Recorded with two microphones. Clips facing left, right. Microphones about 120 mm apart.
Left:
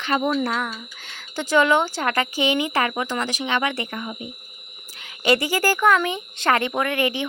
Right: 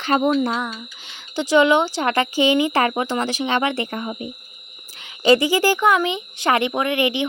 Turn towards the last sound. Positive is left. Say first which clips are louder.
# right 2 dB
turn(degrees=-20)  # may be behind; listen again after turning